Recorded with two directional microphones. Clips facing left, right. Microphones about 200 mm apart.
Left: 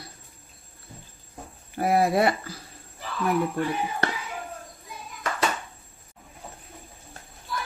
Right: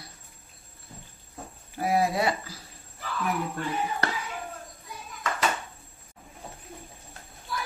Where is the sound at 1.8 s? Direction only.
60° left (ahead or behind).